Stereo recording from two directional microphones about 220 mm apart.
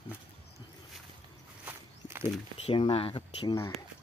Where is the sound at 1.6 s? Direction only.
10° right (ahead or behind).